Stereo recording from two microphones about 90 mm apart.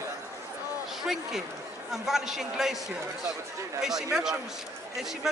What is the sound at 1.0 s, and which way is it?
Speech, 5° right (ahead or behind).